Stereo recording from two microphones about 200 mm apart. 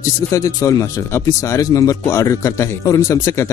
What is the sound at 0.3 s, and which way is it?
Speech, 15° left (ahead or behind).